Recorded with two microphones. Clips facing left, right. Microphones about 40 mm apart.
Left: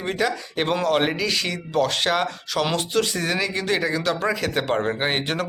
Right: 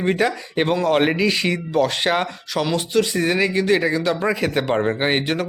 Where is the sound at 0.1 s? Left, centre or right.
Right.